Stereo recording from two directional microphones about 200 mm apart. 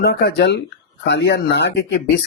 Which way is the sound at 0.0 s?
50° left (ahead or behind).